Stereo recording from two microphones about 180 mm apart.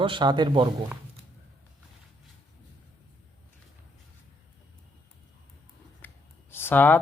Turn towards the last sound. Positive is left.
turn(degrees=10)  # may be behind; listen again after turning